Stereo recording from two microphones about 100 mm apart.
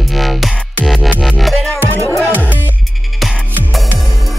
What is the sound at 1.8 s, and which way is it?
Music, 20° left (ahead or behind).